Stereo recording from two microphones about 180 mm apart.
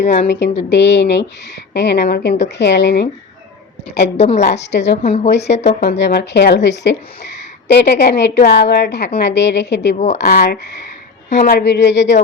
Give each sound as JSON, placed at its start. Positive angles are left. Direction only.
{"t": 0.0, "sound": "a woman's voice", "side_deg": 65}
{"t": 4.2, "sound": "a woman's voice", "side_deg": 35}
{"t": 4.4, "sound": "a woman's voice", "side_deg": 70}
{"t": 5.0, "sound": "a woman's voice", "side_deg": 35}
{"t": 5.5, "sound": "a woman's voice", "side_deg": 75}
{"t": 9.9, "sound": "a woman's voice", "side_deg": 40}
{"t": 10.2, "sound": "a woman's voice", "side_deg": 65}